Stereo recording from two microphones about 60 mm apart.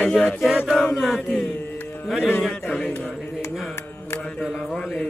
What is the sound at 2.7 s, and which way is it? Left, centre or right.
Speech, left.